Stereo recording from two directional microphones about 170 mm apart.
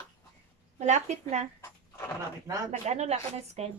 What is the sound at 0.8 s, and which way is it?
Speech, 45° right (ahead or behind).